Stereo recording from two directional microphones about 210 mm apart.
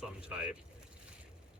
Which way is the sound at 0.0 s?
5° right (ahead or behind).